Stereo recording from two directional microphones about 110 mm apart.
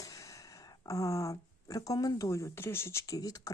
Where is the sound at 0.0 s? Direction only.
30° left (ahead or behind).